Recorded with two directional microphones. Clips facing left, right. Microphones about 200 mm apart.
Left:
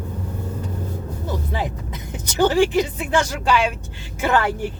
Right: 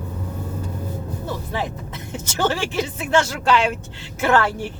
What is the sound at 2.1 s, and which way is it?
Speech, 15° left (ahead or behind).